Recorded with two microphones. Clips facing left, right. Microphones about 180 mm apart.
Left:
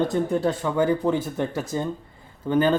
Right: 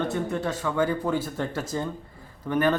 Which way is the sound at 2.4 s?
25° left (ahead or behind).